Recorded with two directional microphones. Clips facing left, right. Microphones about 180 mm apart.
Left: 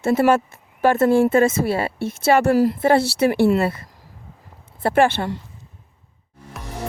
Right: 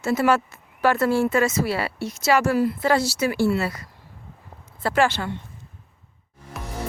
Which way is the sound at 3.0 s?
60° left (ahead or behind).